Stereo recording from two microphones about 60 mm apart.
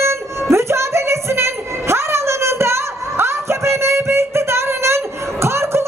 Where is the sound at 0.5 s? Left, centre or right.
Right.